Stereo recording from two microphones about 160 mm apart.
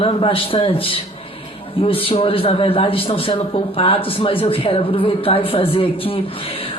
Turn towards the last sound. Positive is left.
turn(degrees=35)  # may be behind; listen again after turning